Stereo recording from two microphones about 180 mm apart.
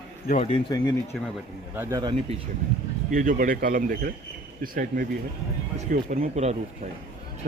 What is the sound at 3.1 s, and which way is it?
Speech, 50° right (ahead or behind).